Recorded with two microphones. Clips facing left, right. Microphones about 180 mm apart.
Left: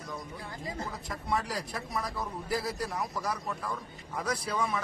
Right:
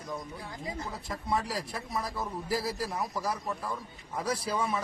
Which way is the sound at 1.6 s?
Centre (ahead or behind).